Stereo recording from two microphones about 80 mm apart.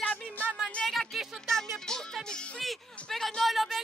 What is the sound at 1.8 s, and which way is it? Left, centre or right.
Music, centre.